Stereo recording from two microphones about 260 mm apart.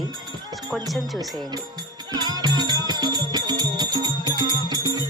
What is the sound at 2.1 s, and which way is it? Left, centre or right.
Music, centre.